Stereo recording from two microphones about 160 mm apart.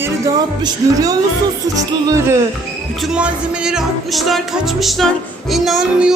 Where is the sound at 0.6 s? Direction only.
20° right (ahead or behind).